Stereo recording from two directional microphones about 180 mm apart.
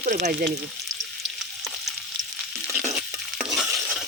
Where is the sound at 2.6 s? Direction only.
Centre (ahead or behind).